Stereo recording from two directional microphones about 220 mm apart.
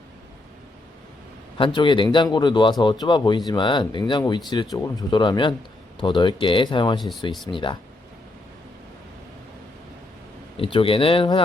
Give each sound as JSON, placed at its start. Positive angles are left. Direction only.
{"t": 1.5, "sound": "speech", "side_deg": 20}
{"t": 10.6, "sound": "speech", "side_deg": 25}